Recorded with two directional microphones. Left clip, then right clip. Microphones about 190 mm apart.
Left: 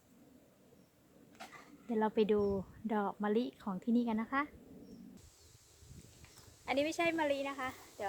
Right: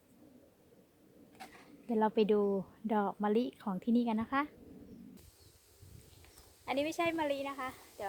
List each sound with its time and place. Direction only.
1.9 s speech: 25° right (ahead or behind)
6.7 s a woman's voice: 10° right (ahead or behind)